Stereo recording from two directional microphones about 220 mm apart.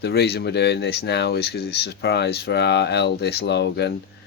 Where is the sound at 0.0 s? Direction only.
50° left (ahead or behind).